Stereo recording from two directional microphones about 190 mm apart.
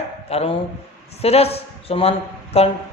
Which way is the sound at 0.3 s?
30° left (ahead or behind).